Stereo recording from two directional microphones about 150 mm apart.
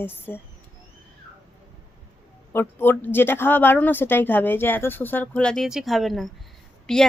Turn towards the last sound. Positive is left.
turn(degrees=5)  # may be behind; listen again after turning